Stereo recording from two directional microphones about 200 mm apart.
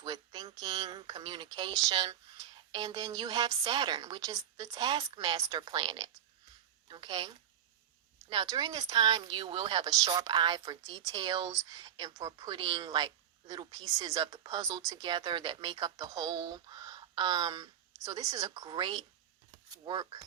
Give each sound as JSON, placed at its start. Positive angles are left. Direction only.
{"t": 0.0, "sound": "speech", "side_deg": -20}